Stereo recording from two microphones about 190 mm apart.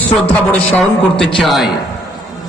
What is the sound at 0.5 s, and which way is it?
A man's voice, 5° left (ahead or behind).